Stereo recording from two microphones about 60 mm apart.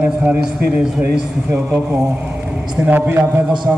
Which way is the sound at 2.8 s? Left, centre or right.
Right.